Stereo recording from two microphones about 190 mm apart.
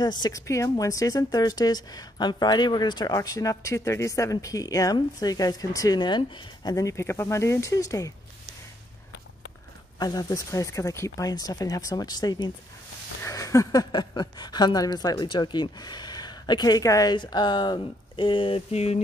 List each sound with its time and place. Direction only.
0.0 s speech: 20° left (ahead or behind)
9.9 s speech: 20° left (ahead or behind)